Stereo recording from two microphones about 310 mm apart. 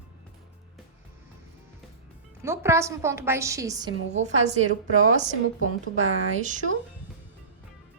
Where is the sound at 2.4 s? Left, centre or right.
Centre.